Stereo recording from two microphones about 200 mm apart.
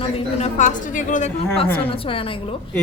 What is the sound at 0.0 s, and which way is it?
A woman's voice, 35° left (ahead or behind).